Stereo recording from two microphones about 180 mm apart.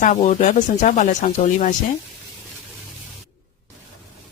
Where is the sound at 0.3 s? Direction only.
45° left (ahead or behind).